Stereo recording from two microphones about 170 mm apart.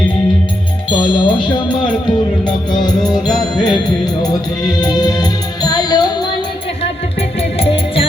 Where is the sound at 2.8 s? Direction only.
25° left (ahead or behind).